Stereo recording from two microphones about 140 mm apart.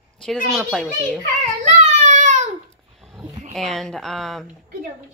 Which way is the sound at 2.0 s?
65° right (ahead or behind).